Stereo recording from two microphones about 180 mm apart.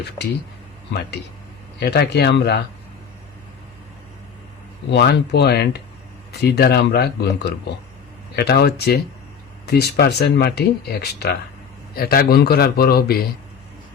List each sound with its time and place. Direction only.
1.8 s speech: 65° left (ahead or behind)
4.9 s speech: 70° left (ahead or behind)